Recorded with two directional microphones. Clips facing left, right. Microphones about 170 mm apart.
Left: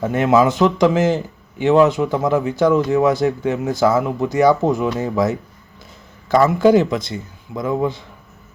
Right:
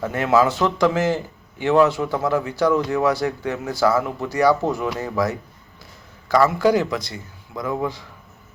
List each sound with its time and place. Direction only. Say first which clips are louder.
0.0 s a man's voice: left 3 dB; 20° left (ahead or behind)